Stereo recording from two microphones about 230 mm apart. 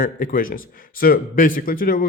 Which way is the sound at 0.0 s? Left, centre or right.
Left.